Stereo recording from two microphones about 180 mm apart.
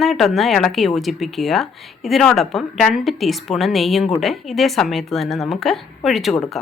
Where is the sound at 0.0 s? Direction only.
Centre (ahead or behind).